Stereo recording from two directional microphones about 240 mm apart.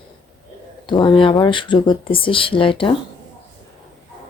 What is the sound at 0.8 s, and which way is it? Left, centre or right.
Speech, centre.